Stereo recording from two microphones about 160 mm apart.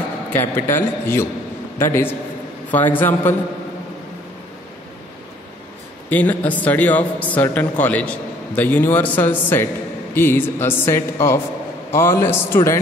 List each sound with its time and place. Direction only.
0.3 s a man's voice: 15° left (ahead or behind)
6.0 s a man's voice: 10° left (ahead or behind)